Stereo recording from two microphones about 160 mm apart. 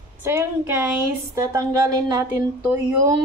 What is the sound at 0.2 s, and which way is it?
A woman's voice, 15° right (ahead or behind).